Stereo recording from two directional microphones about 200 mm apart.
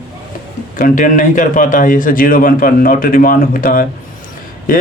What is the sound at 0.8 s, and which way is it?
Speech, 40° left (ahead or behind).